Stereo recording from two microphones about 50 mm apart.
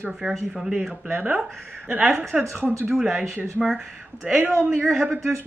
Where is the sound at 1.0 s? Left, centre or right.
Right.